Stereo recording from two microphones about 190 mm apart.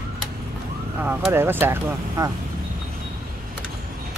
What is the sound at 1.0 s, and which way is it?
Speech, 10° right (ahead or behind).